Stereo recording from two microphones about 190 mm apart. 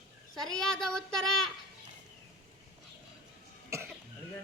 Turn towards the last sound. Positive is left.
turn(degrees=-15)  # may be behind; listen again after turning